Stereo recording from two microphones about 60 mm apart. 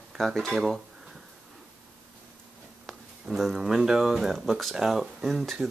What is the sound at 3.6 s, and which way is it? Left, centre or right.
Speech, centre.